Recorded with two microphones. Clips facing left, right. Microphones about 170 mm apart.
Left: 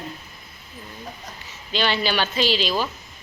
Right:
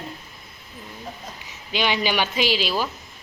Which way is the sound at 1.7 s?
15° right (ahead or behind).